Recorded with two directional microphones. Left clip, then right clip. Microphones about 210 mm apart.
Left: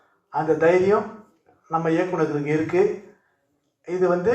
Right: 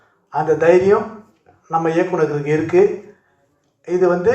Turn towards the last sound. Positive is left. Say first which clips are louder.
# right 5 dB
turn(degrees=-45)  # may be behind; listen again after turning